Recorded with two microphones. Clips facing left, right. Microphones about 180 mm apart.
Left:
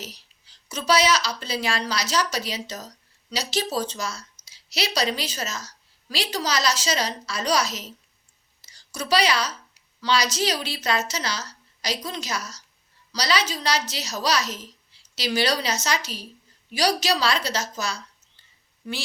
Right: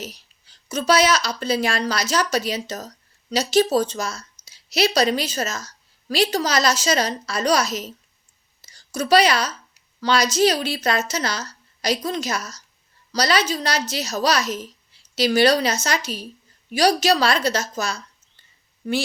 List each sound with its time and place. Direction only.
0.0 s a woman's voice: 50° right (ahead or behind)